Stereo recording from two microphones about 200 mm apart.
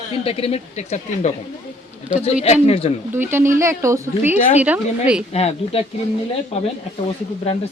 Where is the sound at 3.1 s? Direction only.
10° right (ahead or behind).